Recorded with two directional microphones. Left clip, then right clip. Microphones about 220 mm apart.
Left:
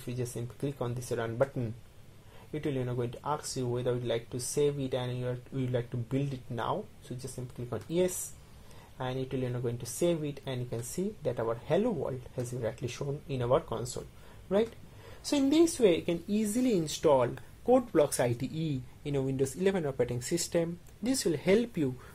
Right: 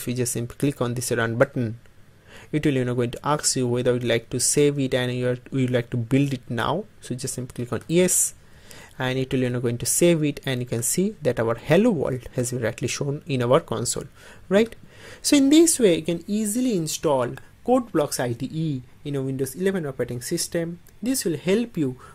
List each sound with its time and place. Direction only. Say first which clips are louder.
0.0 s speech: right 11 dB; 40° right (ahead or behind)
15.2 s speech: right 10 dB; 35° right (ahead or behind)